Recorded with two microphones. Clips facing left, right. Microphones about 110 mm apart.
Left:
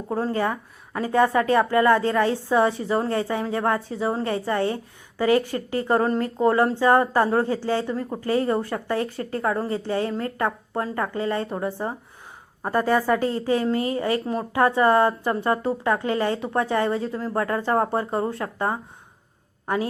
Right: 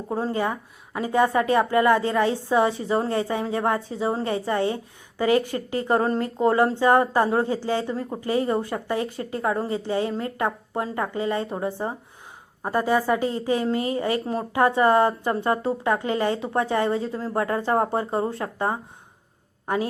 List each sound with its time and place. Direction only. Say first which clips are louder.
0.1 s a woman's voice: left 1 dB; 20° right (ahead or behind)